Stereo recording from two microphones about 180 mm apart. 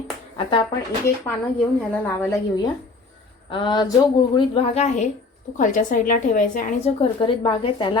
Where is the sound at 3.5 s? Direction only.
25° left (ahead or behind); by 6.9 s 45° left (ahead or behind).